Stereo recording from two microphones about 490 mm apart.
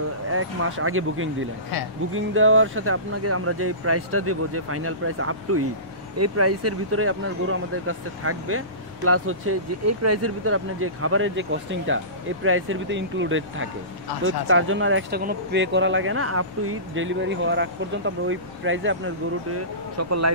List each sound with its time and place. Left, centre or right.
0.3 s speech: right